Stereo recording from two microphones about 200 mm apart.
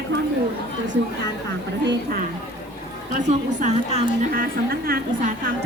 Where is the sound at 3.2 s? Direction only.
35° right (ahead or behind).